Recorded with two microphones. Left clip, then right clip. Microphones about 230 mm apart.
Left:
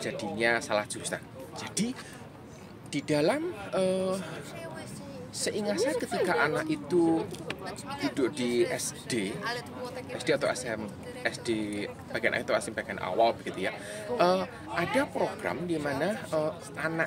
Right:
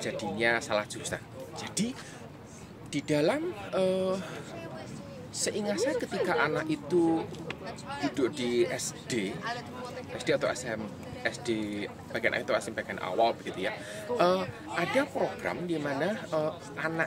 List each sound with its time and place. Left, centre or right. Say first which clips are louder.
0.0 s speech: even; centre
5.4 s speech: left 1 dB; centre
7.4 s a sound: left 1 dB; left
8.2 s speech: even; centre